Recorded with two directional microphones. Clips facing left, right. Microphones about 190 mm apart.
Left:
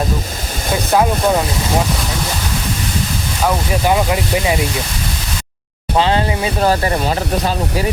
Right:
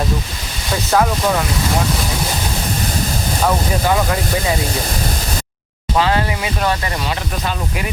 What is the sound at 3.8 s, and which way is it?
Speech, 15° left (ahead or behind).